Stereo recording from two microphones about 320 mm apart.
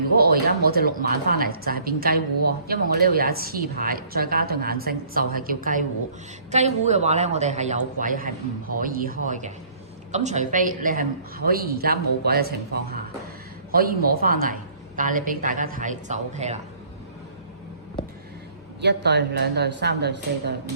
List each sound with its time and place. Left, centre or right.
0.2 s a woman's voice: right
13.7 s a woman's voice: right
18.8 s a woman's voice: right